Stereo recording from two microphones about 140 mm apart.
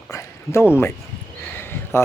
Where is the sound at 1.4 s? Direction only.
15° left (ahead or behind).